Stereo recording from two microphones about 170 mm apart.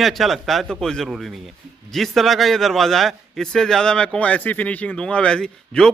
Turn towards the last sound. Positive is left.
turn(degrees=5)  # may be behind; listen again after turning